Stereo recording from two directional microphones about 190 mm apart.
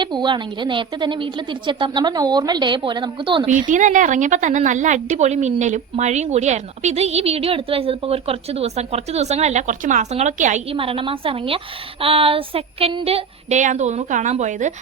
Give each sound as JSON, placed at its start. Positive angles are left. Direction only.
{"t": 0.0, "sound": "a woman's voice", "side_deg": -25}
{"t": 3.4, "sound": "a woman's voice", "side_deg": -40}